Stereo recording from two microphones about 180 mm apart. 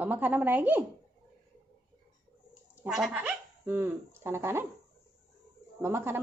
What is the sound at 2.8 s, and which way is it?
Speech, 5° right (ahead or behind).